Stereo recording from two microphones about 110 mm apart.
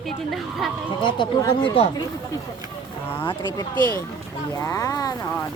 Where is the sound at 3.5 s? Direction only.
35° left (ahead or behind).